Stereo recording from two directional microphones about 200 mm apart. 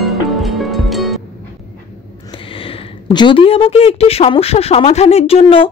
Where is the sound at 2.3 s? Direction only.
25° left (ahead or behind).